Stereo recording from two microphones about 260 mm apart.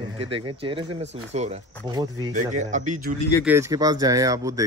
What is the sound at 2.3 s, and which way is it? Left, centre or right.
Speech, right.